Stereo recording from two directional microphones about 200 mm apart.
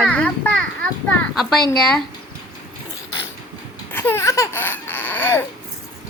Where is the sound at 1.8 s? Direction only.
5° left (ahead or behind).